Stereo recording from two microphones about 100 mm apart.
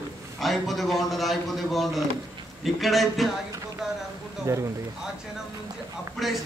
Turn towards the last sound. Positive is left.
turn(degrees=0)  # may be behind; listen again after turning